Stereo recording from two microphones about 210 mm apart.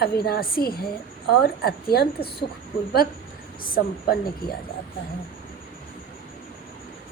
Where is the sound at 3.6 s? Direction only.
45° left (ahead or behind).